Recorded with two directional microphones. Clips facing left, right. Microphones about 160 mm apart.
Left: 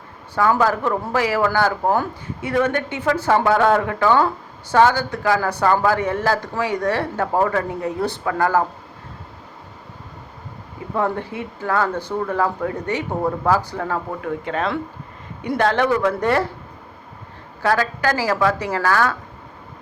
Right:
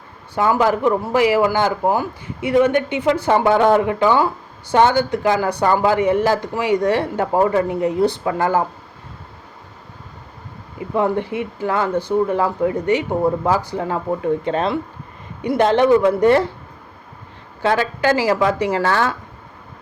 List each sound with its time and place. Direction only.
0.6 s speech: 15° right (ahead or behind)
10.9 s speech: 20° right (ahead or behind)
17.6 s speech: 20° right (ahead or behind)